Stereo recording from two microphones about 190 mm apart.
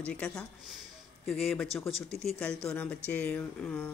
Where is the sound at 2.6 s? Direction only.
5° left (ahead or behind).